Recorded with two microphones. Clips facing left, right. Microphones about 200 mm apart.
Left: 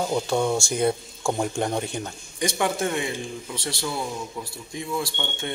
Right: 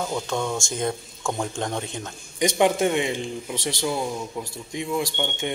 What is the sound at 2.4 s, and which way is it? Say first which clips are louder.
A man's voice: right 5 dB; 20° right (ahead or behind).